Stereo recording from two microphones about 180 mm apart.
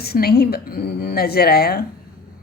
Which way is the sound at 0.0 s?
60° left (ahead or behind).